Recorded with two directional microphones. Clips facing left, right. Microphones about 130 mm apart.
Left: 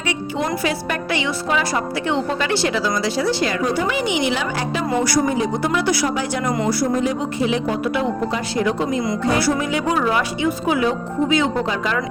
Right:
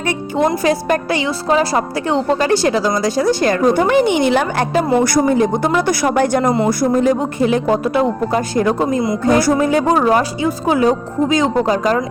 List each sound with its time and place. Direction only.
0.5 s a woman's voice: 40° right (ahead or behind)